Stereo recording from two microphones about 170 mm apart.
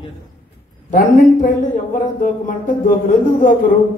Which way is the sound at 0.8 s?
50° left (ahead or behind).